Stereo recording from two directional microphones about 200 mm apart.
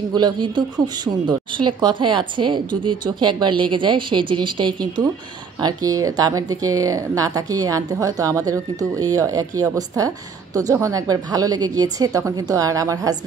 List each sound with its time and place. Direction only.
0.1 s a woman's voice: 20° right (ahead or behind)